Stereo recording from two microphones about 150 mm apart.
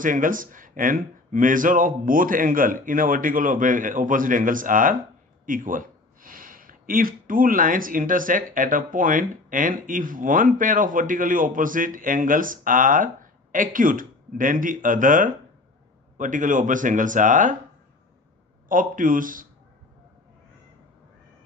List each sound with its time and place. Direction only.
0.0 s speech: 65° right (ahead or behind)
18.7 s speech: 65° right (ahead or behind)